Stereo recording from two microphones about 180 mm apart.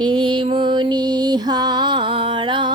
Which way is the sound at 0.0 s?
25° right (ahead or behind).